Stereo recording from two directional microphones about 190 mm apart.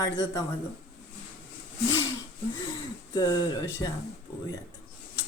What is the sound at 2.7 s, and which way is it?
Wheeze, 20° left (ahead or behind).